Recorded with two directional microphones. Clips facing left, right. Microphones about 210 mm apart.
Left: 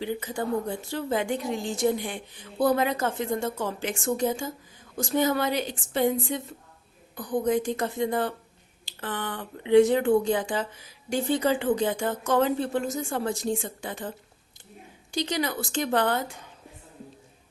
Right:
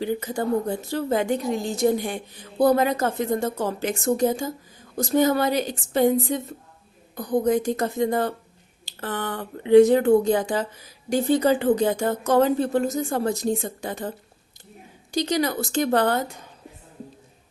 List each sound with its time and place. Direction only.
0.0 s a woman's voice: 40° right (ahead or behind)
15.1 s a woman's voice: 40° right (ahead or behind)